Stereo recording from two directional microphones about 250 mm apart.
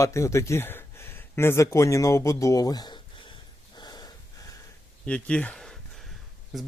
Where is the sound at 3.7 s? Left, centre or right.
Centre.